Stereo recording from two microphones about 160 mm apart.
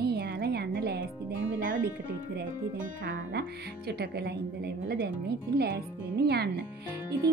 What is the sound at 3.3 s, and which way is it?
Speech, 90° right.